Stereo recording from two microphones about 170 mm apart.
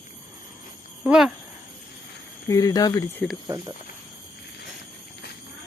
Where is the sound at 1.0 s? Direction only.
5° right (ahead or behind).